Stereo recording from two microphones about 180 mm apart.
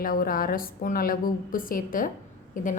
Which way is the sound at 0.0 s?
50° left (ahead or behind).